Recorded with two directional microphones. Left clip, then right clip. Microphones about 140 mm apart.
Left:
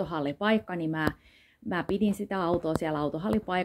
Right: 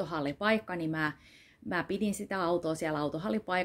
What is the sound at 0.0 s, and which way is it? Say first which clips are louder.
Speech: left 2 dB; 25° right (ahead or behind).